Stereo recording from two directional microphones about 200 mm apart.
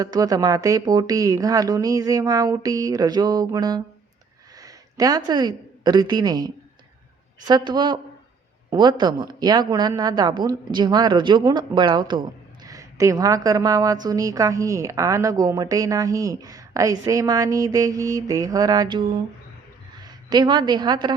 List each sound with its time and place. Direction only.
0.0 s a woman's voice: 20° right (ahead or behind)